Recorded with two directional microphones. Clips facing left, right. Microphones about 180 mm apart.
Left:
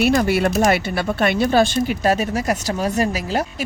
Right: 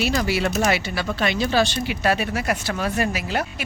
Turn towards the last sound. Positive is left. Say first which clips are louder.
# left 3 dB
turn(degrees=40)  # may be behind; listen again after turning